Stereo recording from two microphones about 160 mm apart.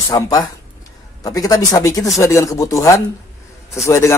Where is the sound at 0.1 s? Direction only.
30° left (ahead or behind).